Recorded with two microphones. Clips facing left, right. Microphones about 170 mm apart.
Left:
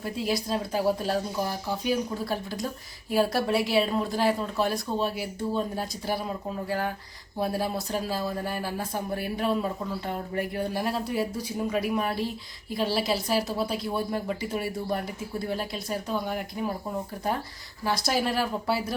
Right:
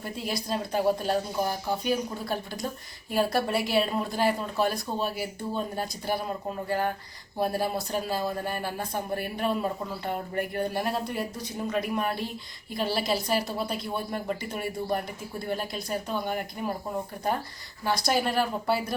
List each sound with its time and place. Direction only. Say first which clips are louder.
0.0 s a woman's voice: left 4 dB; centre (ahead or behind)
17.8 s a woman's voice: even; centre (ahead or behind)